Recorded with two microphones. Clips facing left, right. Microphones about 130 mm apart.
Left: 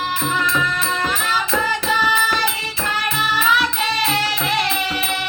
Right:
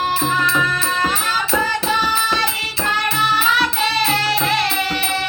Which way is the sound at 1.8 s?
30° right (ahead or behind).